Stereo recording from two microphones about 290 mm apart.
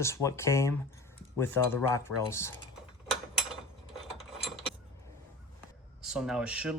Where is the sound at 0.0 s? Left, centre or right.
Centre.